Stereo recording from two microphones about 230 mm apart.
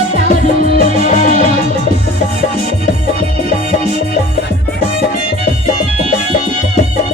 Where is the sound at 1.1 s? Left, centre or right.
Left.